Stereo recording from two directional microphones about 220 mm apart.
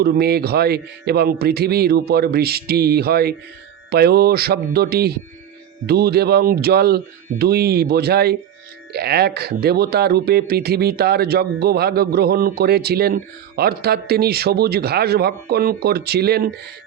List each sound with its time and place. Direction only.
0.0 s speech: 45° right (ahead or behind)